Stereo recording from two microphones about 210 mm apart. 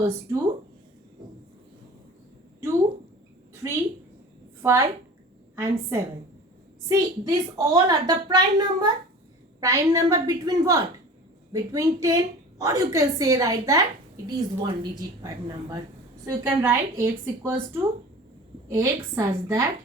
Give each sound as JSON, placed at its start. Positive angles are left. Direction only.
{"t": 3.6, "sound": "a woman's voice", "side_deg": -15}
{"t": 18.7, "sound": "a woman's voice", "side_deg": -15}